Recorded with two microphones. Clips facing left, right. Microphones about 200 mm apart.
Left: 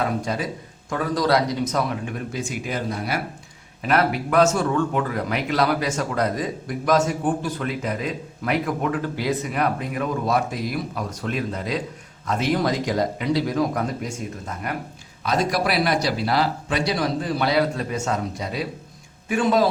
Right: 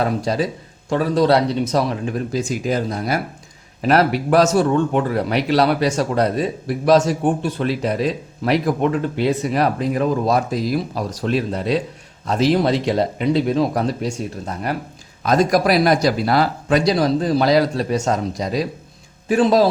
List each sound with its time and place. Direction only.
0.0 s a man's voice: 35° right (ahead or behind)
15.2 s a man's voice: 45° right (ahead or behind)